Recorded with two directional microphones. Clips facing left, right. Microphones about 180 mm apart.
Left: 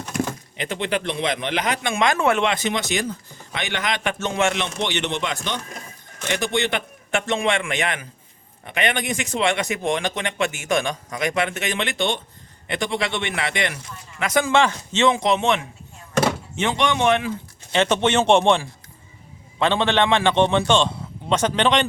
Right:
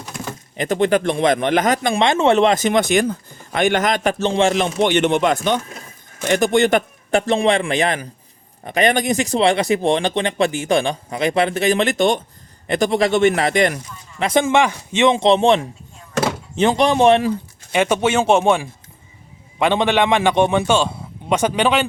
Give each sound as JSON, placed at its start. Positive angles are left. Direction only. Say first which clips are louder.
{"t": 0.5, "sound": "speech", "louder": "right 9 dB", "side_deg": -45}
{"t": 4.8, "sound": "speech", "louder": "right 12 dB", "side_deg": -50}
{"t": 14.3, "sound": "a man's voice", "louder": "right 3 dB", "side_deg": -25}
{"t": 15.1, "sound": "speech", "louder": "right 6 dB", "side_deg": -30}
{"t": 17.7, "sound": "a man's voice", "louder": "right 2 dB", "side_deg": -10}